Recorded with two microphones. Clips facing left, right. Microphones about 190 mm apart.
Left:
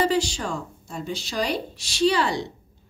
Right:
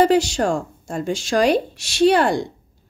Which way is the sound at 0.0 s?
70° right (ahead or behind).